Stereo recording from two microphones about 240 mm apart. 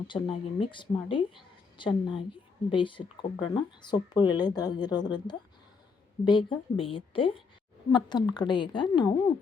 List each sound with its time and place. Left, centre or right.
0.1 s a woman's voice: centre